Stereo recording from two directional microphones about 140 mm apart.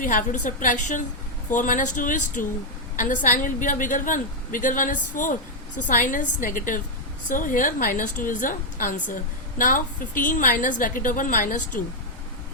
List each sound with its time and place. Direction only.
0.0 s a woman's voice: 70° left (ahead or behind)